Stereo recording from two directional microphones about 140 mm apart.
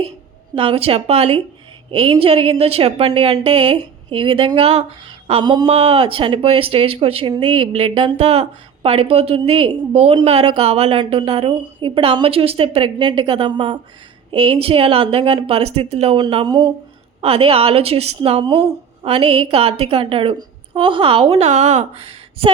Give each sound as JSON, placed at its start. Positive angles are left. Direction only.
{"t": 0.5, "sound": "a woman's voice", "side_deg": -40}
{"t": 16.3, "sound": "a woman's voice", "side_deg": -35}